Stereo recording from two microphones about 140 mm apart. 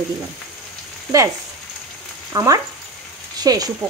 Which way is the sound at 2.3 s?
25° right (ahead or behind).